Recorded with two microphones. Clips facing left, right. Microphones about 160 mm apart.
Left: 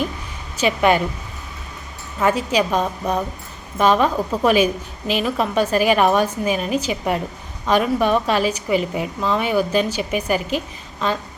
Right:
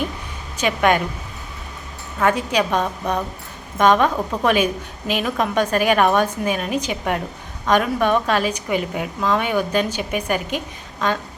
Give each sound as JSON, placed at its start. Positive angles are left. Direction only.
{"t": 0.5, "sound": "a woman's voice", "side_deg": 10}
{"t": 2.1, "sound": "a woman's voice", "side_deg": 10}